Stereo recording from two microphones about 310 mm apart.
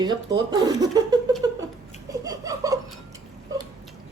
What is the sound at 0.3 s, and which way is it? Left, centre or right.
Speech, centre.